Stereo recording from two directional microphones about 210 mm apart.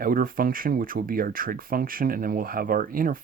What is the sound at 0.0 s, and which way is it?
Speech, 45° right (ahead or behind).